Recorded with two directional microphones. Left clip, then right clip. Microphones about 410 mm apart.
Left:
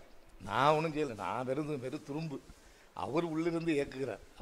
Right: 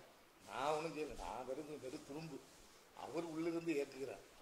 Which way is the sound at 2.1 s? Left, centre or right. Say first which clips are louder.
Left 9 dB; left.